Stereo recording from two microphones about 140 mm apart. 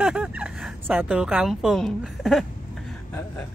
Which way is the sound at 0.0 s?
10° right (ahead or behind).